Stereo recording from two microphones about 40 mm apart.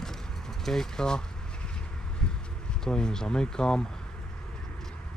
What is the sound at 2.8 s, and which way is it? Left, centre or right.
Speech, centre.